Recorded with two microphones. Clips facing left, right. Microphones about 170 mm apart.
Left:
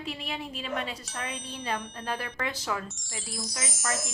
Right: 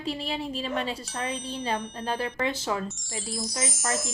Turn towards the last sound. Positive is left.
turn(degrees=0)  # may be behind; listen again after turning